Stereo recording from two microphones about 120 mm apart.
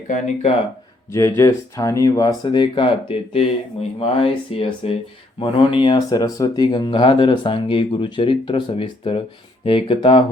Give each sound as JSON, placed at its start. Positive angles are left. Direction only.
{"t": 0.1, "sound": "speech", "side_deg": 70}
{"t": 1.1, "sound": "speech", "side_deg": 25}
{"t": 5.4, "sound": "speech", "side_deg": 45}
{"t": 6.1, "sound": "speech", "side_deg": 30}